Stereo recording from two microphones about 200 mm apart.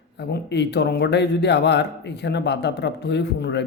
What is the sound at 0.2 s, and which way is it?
Speech, 55° left (ahead or behind).